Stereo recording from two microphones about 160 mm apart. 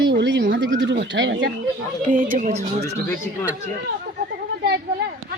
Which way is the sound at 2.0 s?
55° right (ahead or behind).